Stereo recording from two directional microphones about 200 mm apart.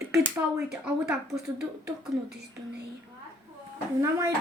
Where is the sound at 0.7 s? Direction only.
Centre (ahead or behind).